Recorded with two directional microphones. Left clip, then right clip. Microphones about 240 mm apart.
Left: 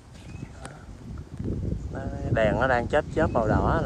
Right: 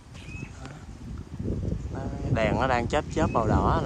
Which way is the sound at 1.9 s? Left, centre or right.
Right.